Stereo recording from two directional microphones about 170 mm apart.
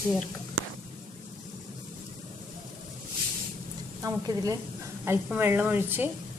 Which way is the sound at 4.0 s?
20° right (ahead or behind).